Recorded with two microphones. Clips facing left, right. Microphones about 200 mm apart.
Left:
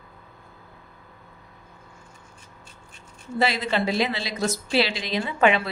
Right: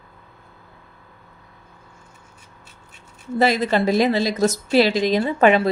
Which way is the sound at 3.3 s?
45° right (ahead or behind).